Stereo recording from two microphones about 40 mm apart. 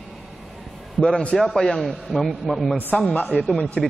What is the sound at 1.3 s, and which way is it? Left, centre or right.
A man's voice, centre.